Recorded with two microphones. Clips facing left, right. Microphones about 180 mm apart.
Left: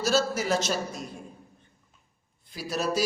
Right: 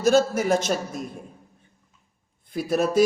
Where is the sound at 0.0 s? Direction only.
55° right (ahead or behind).